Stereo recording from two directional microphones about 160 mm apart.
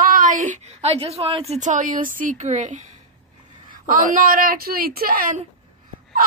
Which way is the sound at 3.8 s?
60° right (ahead or behind).